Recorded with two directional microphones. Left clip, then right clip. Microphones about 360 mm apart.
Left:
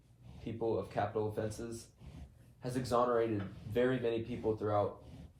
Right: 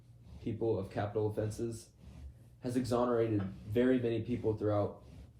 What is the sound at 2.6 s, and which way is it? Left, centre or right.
Speech, centre.